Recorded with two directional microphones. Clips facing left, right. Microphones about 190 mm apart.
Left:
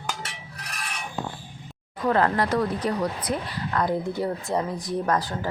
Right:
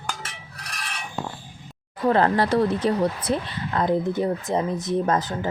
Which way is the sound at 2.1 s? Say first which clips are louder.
Right 3 dB; 30° right (ahead or behind).